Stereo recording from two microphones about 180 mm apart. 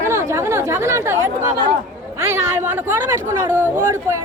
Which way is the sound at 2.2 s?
10° right (ahead or behind).